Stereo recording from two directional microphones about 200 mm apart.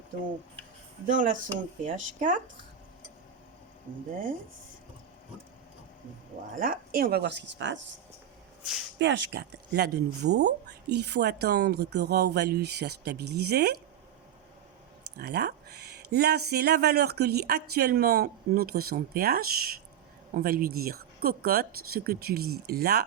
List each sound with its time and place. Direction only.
1.0 s speech: 40° right (ahead or behind)
6.6 s speech: 45° right (ahead or behind); by 7.8 s 65° right (ahead or behind)
9.0 s speech: 60° right (ahead or behind)
15.2 s speech: 55° right (ahead or behind)